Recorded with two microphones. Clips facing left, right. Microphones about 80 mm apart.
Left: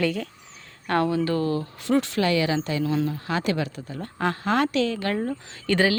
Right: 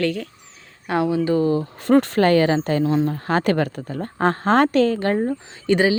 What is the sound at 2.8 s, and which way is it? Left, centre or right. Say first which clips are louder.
Speech: right 5 dB; right.